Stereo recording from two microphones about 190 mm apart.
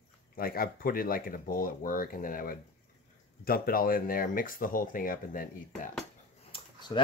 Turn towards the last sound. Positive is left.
turn(degrees=25)  # may be behind; listen again after turning